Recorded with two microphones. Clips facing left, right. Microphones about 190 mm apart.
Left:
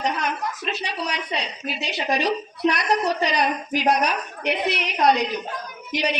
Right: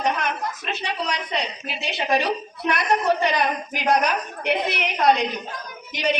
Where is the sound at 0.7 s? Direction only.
60° right (ahead or behind).